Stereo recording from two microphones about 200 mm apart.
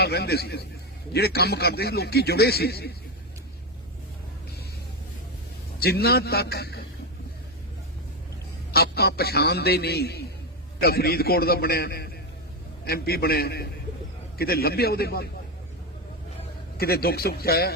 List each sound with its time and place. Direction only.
0.0 s a man's voice: 55° left (ahead or behind)
5.8 s a man's voice: 50° left (ahead or behind)
8.7 s a man's voice: 50° left (ahead or behind)
16.7 s a man's voice: 50° left (ahead or behind)